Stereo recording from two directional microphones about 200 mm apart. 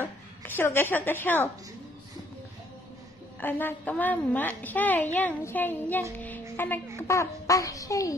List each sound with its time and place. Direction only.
0.0 s speech: 10° left (ahead or behind)
3.3 s a child's voice: 10° left (ahead or behind)